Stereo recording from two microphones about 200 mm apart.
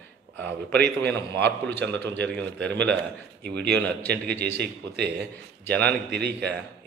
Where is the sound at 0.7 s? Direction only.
55° right (ahead or behind).